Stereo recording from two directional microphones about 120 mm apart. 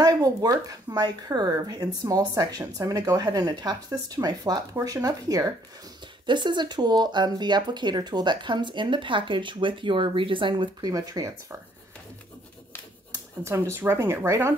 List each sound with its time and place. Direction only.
0.0 s speech: 30° right (ahead or behind)
6.2 s speech: 40° right (ahead or behind)
10.9 s speech: 30° right (ahead or behind)
13.4 s speech: 20° right (ahead or behind)